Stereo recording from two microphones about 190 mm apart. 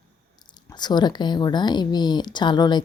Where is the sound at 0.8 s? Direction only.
20° left (ahead or behind).